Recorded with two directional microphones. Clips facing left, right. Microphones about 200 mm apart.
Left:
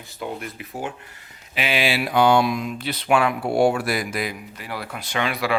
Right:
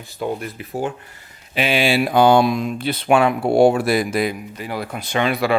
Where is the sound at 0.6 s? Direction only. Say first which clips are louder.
Right 6 dB; 35° right (ahead or behind).